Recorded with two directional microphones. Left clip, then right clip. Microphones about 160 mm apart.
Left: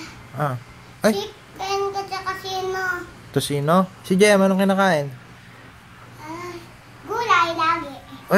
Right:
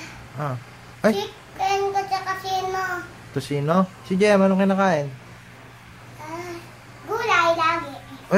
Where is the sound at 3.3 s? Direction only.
35° left (ahead or behind).